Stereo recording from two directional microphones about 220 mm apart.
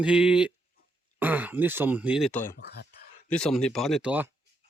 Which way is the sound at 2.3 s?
10° left (ahead or behind).